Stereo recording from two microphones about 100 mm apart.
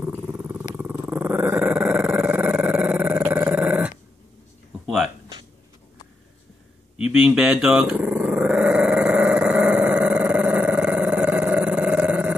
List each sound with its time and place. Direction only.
0.3 s roaring cats: 15° right (ahead or behind)
1.0 s dog: 15° right (ahead or behind)
4.8 s a sound: 5° right (ahead or behind)
7.0 s speech: 10° right (ahead or behind)
7.9 s dog: 10° right (ahead or behind)